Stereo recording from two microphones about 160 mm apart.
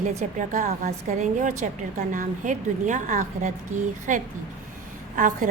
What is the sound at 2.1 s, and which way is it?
A woman's voice, 55° right (ahead or behind).